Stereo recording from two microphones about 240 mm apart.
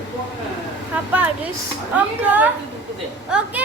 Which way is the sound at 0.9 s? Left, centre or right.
Centre.